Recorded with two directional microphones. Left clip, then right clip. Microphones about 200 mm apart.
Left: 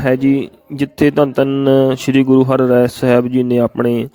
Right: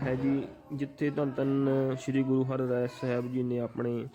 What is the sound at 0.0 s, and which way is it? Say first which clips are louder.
Speech: left 17 dB; 55° left (ahead or behind).